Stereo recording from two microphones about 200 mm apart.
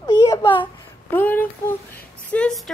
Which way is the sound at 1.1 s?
10° left (ahead or behind).